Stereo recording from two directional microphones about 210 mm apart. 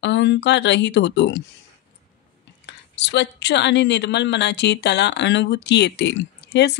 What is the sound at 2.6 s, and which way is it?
A woman's voice, 55° left (ahead or behind).